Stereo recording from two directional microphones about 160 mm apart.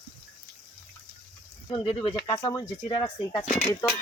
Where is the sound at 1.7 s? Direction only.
35° left (ahead or behind).